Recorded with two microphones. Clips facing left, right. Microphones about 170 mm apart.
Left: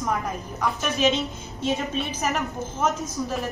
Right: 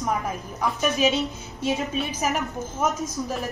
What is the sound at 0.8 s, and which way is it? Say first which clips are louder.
Speech: right 2 dB; 5° right (ahead or behind).